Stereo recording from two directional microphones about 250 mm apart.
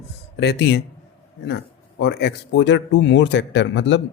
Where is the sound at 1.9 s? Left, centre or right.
Left.